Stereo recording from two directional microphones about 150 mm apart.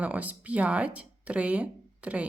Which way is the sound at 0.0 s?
10° right (ahead or behind).